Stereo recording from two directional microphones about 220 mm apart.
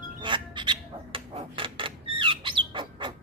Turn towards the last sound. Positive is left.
turn(degrees=-20)  # may be behind; listen again after turning